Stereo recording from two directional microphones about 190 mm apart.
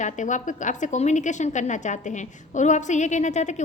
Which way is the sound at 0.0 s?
40° left (ahead or behind).